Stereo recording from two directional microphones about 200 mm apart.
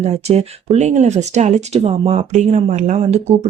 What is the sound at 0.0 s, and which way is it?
Speech, 30° right (ahead or behind).